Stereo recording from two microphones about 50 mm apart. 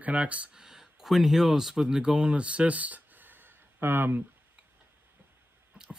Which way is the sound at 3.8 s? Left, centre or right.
Right.